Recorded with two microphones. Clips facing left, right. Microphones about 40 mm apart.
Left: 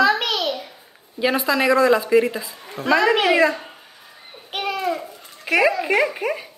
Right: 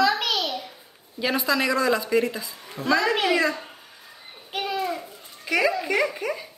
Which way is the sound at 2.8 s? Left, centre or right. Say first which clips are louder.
Left 5 dB; left.